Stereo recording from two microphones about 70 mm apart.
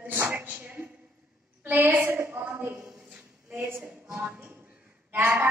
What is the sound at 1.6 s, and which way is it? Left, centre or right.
A woman's voice, right.